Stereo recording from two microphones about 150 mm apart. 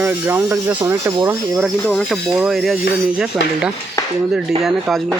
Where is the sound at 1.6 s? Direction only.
Centre (ahead or behind).